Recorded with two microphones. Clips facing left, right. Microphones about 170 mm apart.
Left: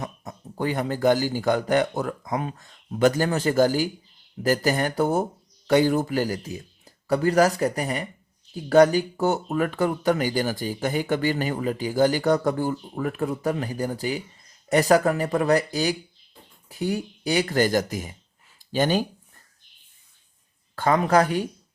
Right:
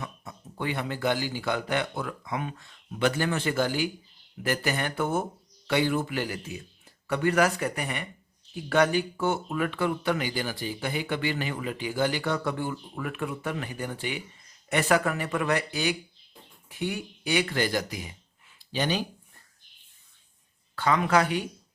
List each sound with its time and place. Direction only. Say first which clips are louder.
0.0 s speech: left 5 dB; 40° left (ahead or behind)
20.7 s speech: left 4 dB; 40° left (ahead or behind)